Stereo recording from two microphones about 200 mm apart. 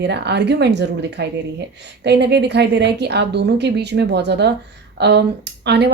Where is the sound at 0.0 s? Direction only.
55° right (ahead or behind).